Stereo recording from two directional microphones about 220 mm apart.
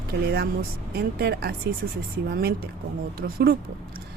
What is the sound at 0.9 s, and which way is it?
Speech, 45° right (ahead or behind).